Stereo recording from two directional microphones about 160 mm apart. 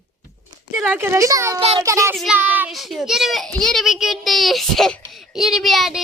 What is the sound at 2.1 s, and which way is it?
Speech, centre (ahead or behind).